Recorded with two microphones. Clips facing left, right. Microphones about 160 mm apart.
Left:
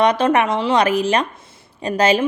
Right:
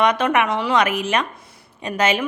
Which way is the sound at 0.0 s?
30° left (ahead or behind).